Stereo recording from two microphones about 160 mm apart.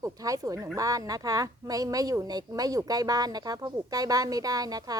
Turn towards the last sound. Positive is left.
turn(degrees=-25)  # may be behind; listen again after turning